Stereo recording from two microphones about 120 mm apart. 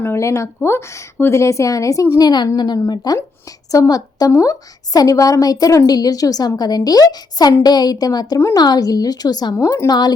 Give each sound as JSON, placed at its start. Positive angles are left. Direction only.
{"t": 0.0, "sound": "a woman's voice", "side_deg": 20}
{"t": 8.4, "sound": "speech", "side_deg": 20}
{"t": 8.6, "sound": "a woman's voice", "side_deg": 35}
{"t": 9.6, "sound": "speech", "side_deg": 25}